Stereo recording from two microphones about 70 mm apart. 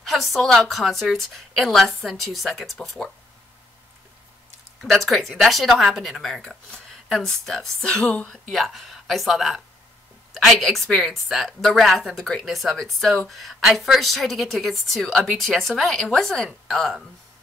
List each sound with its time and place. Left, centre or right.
0.0 s a woman's voice: centre
4.9 s a woman's voice: centre
6.4 s speech: centre
8.5 s a woman's voice: centre
10.6 s a woman's voice: centre